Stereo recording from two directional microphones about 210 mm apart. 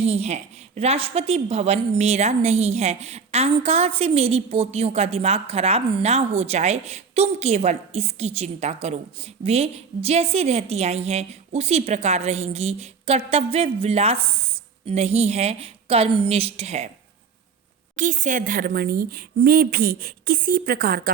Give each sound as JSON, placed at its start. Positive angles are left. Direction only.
{"t": 0.0, "sound": "a woman's voice", "side_deg": -30}
{"t": 17.9, "sound": "a woman's voice", "side_deg": -35}